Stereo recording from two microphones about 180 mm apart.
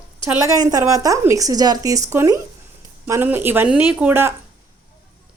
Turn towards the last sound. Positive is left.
turn(degrees=-10)  # may be behind; listen again after turning